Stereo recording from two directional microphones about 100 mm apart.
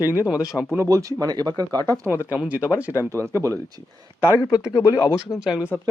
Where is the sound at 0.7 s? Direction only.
30° right (ahead or behind).